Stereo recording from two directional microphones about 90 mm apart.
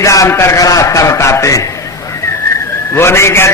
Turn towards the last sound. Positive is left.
turn(degrees=30)  # may be behind; listen again after turning